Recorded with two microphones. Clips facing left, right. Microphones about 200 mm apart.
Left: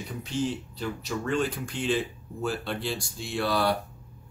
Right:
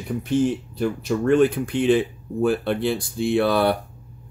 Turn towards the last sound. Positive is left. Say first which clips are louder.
# right 7 dB
turn(degrees=-55)  # may be behind; listen again after turning